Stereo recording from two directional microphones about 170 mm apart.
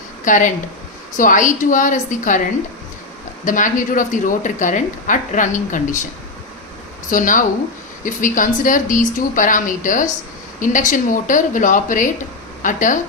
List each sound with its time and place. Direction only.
0.3 s a woman's voice: 50° left (ahead or behind)
3.4 s a woman's voice: 50° left (ahead or behind)
7.1 s a woman's voice: 50° left (ahead or behind)